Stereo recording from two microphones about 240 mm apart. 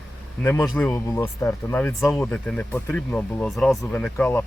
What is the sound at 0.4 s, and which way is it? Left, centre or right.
Speech, centre.